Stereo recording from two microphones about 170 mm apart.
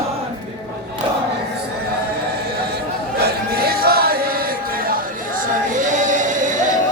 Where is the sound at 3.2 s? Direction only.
65° right (ahead or behind).